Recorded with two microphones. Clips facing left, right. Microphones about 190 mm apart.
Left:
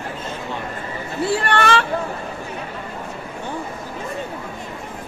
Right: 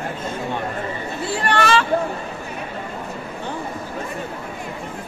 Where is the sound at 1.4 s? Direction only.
55° left (ahead or behind).